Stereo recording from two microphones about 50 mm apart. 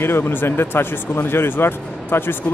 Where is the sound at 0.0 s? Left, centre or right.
Left.